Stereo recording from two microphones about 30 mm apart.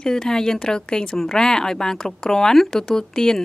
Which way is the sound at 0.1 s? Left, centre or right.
Left.